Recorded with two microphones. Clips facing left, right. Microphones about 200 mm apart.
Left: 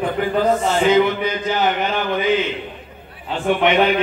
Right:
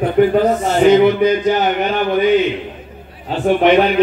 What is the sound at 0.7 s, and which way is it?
Speech, 45° right (ahead or behind).